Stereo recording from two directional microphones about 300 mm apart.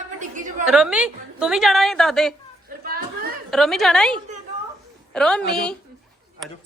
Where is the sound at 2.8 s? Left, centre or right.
Right.